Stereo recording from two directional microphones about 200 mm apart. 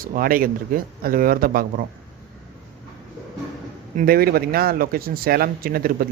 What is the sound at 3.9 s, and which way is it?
Speech, 50° right (ahead or behind).